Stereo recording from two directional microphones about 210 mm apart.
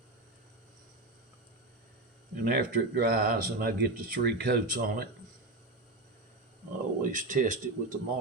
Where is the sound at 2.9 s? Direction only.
45° right (ahead or behind).